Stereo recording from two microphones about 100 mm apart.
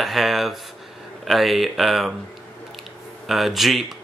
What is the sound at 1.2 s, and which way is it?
Speech, centre (ahead or behind).